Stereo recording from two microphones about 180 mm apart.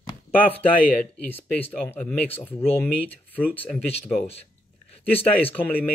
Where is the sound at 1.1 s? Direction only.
10° left (ahead or behind).